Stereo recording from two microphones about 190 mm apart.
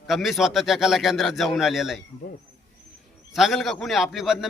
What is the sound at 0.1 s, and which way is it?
Speech, centre (ahead or behind).